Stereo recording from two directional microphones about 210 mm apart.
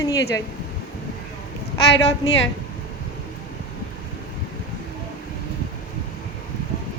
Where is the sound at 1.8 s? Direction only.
60° left (ahead or behind).